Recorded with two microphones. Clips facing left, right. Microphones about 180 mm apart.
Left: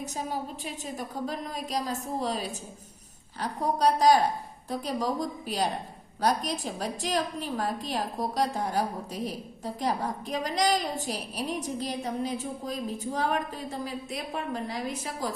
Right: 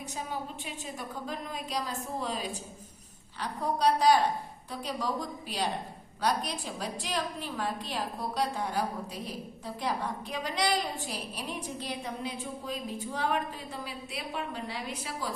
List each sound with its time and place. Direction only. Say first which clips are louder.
0.0 s a woman's voice: left 4 dB; 40° left (ahead or behind)